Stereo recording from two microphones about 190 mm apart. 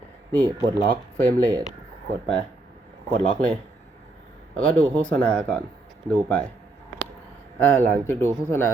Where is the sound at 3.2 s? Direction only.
5° left (ahead or behind).